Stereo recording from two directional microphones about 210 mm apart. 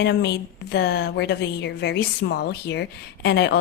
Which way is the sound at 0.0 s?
50° left (ahead or behind).